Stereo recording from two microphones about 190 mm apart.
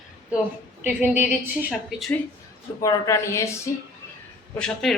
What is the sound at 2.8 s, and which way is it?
Speech, 20° left (ahead or behind).